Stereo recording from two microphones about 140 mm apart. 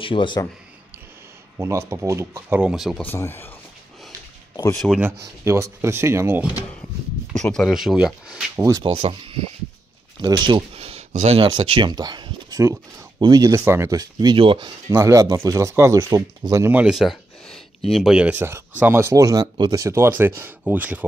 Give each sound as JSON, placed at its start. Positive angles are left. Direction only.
{"t": 0.0, "sound": "speech", "side_deg": 35}
{"t": 1.6, "sound": "speech", "side_deg": -20}
{"t": 2.6, "sound": "speech", "side_deg": 0}
{"t": 3.0, "sound": "speech", "side_deg": 15}
{"t": 5.0, "sound": "speech", "side_deg": -20}
{"t": 7.3, "sound": "speech", "side_deg": 5}
{"t": 8.5, "sound": "speech", "side_deg": -25}
{"t": 8.8, "sound": "speech", "side_deg": -40}
{"t": 14.9, "sound": "speech", "side_deg": -20}
{"t": 16.7, "sound": "a sound", "side_deg": -5}
{"t": 17.9, "sound": "speech", "side_deg": -5}